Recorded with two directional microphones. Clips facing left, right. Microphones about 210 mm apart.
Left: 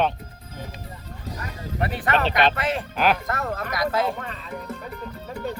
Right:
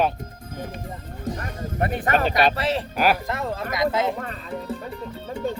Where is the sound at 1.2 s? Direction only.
50° right (ahead or behind).